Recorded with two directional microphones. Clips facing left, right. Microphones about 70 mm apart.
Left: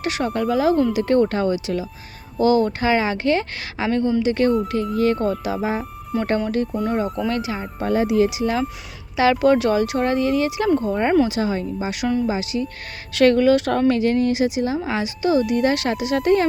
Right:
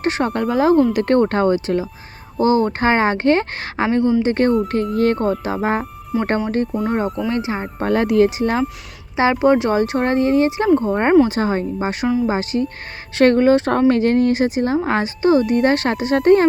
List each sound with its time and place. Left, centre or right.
0.0 s speech: right
0.3 s speech: right
3.8 s speech: right
4.2 s speech: right
6.7 s speech: centre
7.3 s speech: right
7.6 s speech: right
9.1 s speech: right
12.0 s speech: centre
12.3 s speech: right